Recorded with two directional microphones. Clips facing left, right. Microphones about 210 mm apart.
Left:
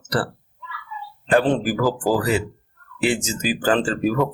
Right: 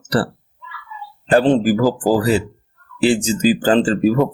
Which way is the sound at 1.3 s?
30° right (ahead or behind).